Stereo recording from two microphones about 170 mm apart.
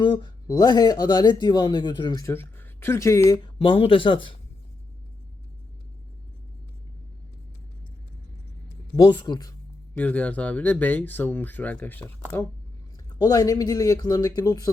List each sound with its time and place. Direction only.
0.0 s speech: 25° left (ahead or behind)
3.6 s speech: 30° left (ahead or behind)
9.0 s speech: 25° left (ahead or behind)
10.0 s speech: 10° left (ahead or behind)
13.1 s speech: 20° left (ahead or behind)